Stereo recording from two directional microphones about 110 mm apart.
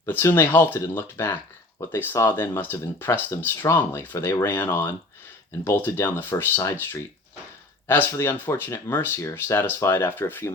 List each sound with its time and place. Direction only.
0.0 s speech: 20° left (ahead or behind)
7.9 s speech: 20° left (ahead or behind)